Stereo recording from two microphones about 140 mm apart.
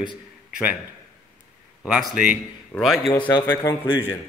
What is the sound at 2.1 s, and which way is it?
Speech, 90° left.